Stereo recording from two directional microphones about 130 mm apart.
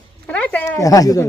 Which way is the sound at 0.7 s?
25° left (ahead or behind).